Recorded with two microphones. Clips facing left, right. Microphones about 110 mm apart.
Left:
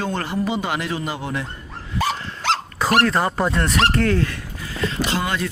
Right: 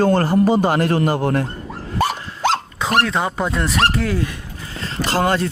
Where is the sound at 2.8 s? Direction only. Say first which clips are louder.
Left 1 dB; centre (ahead or behind).